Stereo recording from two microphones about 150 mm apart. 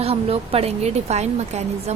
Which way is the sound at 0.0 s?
40° right (ahead or behind).